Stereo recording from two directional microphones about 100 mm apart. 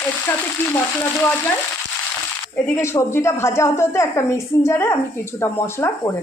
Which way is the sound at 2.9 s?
30° left (ahead or behind).